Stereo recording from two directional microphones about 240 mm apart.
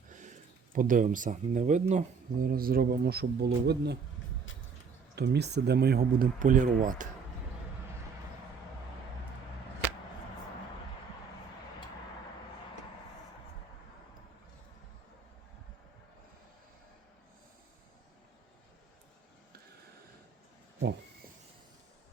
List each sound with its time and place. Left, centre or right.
0.1 s speech: right
5.1 s speech: right